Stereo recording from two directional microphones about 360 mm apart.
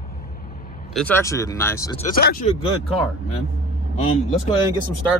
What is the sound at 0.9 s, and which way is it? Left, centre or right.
Speech, centre.